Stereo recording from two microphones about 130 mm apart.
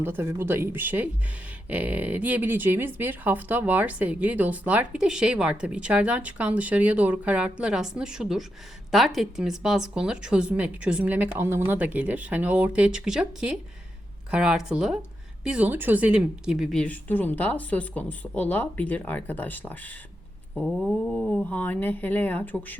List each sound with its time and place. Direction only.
0.0 s speech: 15° right (ahead or behind)
16.8 s speech: 10° left (ahead or behind)
20.7 s speech: centre (ahead or behind)